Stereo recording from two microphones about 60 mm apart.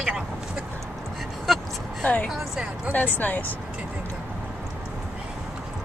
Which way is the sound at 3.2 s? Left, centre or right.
Left.